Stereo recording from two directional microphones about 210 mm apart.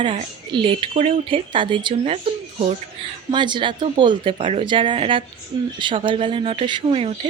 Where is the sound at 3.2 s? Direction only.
20° right (ahead or behind).